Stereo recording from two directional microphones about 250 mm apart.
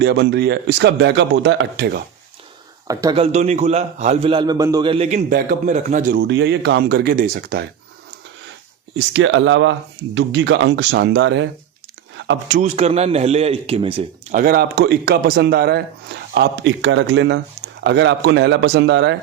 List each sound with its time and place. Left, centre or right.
0.0 s a man's voice: right
2.8 s speech: centre
3.3 s a man's voice: right
6.2 s a man's voice: right
9.1 s a man's voice: right
12.5 s a man's voice: right